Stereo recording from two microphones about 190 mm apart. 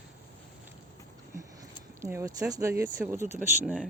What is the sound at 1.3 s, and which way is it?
Speech, 15° right (ahead or behind).